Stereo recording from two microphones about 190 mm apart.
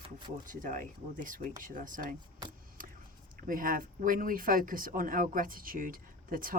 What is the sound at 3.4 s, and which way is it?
Speech, 45° right (ahead or behind).